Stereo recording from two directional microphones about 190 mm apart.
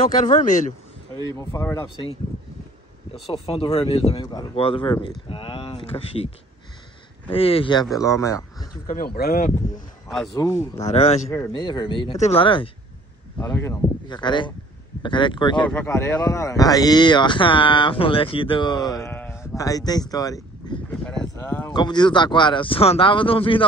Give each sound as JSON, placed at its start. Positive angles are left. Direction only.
{"t": 0.1, "sound": "speech", "side_deg": 40}
{"t": 1.3, "sound": "speech", "side_deg": 15}
{"t": 3.5, "sound": "speech", "side_deg": 30}
{"t": 7.9, "sound": "speech", "side_deg": 15}
{"t": 8.8, "sound": "speech", "side_deg": 50}
{"t": 10.0, "sound": "speech", "side_deg": 0}
{"t": 10.3, "sound": "speech", "side_deg": 15}
{"t": 10.8, "sound": "speech", "side_deg": 35}
{"t": 11.2, "sound": "speech", "side_deg": 15}
{"t": 13.4, "sound": "speech", "side_deg": 15}
{"t": 15.6, "sound": "speech", "side_deg": 10}
{"t": 20.9, "sound": "speech", "side_deg": 5}
{"t": 21.7, "sound": "speech", "side_deg": 25}